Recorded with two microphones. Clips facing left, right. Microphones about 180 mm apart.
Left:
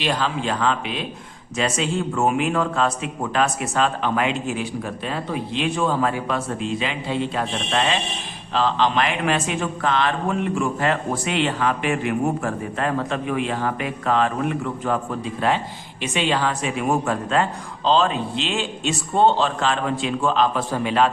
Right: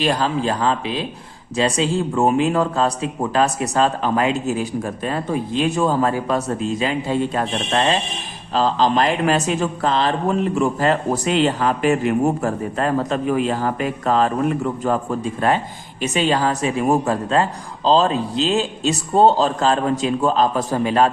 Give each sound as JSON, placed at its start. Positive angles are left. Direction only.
{"t": 0.0, "sound": "speech", "side_deg": -40}